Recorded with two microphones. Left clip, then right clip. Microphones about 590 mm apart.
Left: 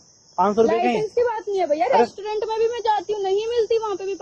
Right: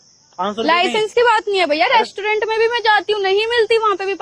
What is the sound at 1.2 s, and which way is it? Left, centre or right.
A woman's voice, right.